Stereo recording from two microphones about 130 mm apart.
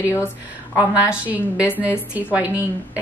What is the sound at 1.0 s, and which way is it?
A woman's voice, 10° right (ahead or behind).